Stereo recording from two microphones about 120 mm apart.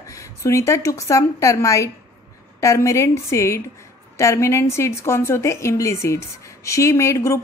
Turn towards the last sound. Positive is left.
turn(degrees=25)  # may be behind; listen again after turning